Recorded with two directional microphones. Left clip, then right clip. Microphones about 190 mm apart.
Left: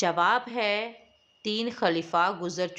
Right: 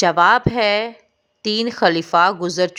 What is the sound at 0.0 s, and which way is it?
A woman's voice, 40° right (ahead or behind).